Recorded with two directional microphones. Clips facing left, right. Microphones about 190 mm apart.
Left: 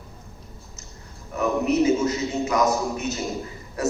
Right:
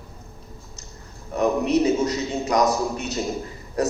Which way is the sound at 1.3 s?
35° right (ahead or behind).